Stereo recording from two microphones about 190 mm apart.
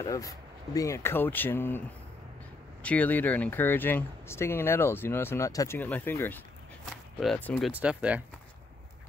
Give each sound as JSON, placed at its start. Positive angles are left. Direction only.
{"t": 0.0, "sound": "speech", "side_deg": 20}
{"t": 2.8, "sound": "speech", "side_deg": 10}
{"t": 7.7, "sound": "speech", "side_deg": -5}